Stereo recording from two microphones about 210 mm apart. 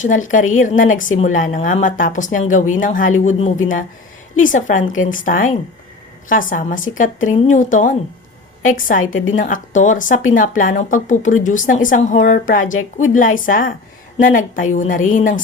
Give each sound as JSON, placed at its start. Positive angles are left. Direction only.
{"t": 0.0, "sound": "a woman's voice", "side_deg": 35}
{"t": 4.8, "sound": "speech", "side_deg": 70}
{"t": 5.0, "sound": "a woman's voice", "side_deg": 40}